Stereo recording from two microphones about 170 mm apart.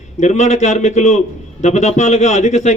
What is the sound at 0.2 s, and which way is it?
A man's voice, 45° left (ahead or behind).